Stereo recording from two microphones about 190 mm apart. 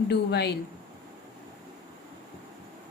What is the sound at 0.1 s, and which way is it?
Speech, 60° left (ahead or behind).